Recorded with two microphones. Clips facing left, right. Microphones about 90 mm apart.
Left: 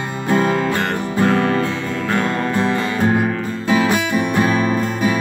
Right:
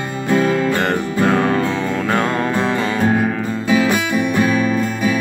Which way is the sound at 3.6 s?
35° left (ahead or behind).